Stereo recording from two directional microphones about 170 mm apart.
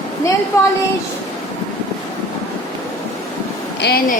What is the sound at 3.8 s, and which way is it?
Speech, 60° left (ahead or behind).